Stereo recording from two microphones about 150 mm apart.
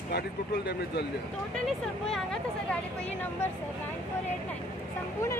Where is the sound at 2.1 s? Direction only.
Centre (ahead or behind).